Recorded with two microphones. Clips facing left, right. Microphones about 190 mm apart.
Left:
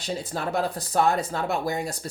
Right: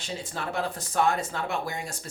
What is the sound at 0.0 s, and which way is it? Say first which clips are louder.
Speech: left 5 dB; 40° left (ahead or behind).